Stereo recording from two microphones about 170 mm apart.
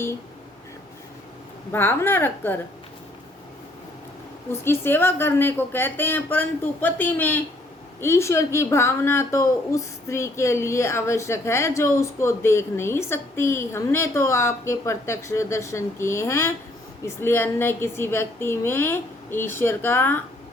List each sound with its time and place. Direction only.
1.7 s a woman's voice: 15° left (ahead or behind)
4.6 s a woman's voice: 15° left (ahead or behind)